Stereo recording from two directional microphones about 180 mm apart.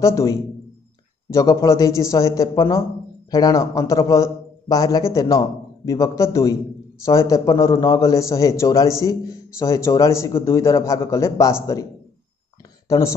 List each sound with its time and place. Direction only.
0.0 s a man's voice: 15° left (ahead or behind)
12.8 s speech: 20° left (ahead or behind)